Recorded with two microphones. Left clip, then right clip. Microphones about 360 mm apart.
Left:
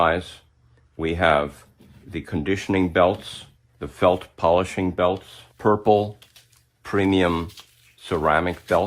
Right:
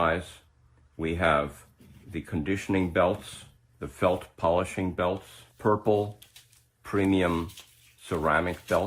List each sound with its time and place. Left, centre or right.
0.9 s speech: left